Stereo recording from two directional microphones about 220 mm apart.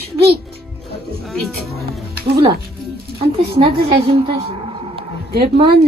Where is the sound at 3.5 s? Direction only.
25° right (ahead or behind).